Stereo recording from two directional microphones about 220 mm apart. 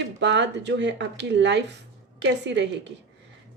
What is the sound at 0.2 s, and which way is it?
Speech, 50° right (ahead or behind).